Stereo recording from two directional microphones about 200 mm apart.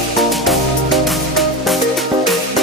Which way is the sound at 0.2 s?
Centre (ahead or behind).